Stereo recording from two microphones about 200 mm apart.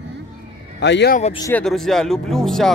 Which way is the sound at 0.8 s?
60° left (ahead or behind).